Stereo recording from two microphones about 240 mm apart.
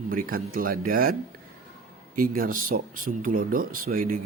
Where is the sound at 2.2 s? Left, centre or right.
Right.